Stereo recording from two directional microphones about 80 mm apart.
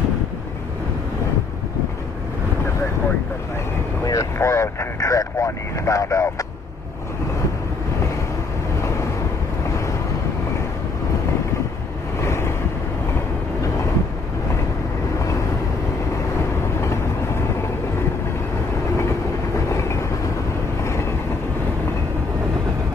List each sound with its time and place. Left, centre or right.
4.0 s vehicle: left
12.2 s vehicle: left
16.8 s vehicle: left
19.7 s train: left